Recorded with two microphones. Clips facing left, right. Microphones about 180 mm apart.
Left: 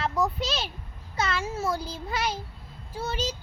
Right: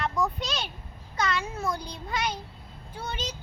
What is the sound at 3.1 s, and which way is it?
Child singing, 30° left (ahead or behind).